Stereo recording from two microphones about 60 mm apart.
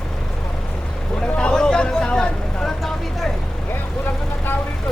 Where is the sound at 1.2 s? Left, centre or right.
Centre.